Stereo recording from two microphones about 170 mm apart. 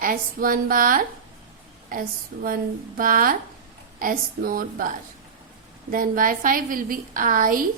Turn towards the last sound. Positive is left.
turn(degrees=-55)  # may be behind; listen again after turning